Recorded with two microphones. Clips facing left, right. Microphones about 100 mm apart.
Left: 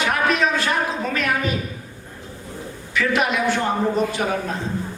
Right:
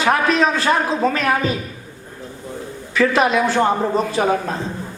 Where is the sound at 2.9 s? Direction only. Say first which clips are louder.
Right 5 dB; 35° right (ahead or behind).